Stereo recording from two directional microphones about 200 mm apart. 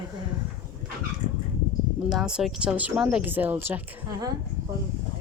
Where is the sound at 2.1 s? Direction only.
Centre (ahead or behind).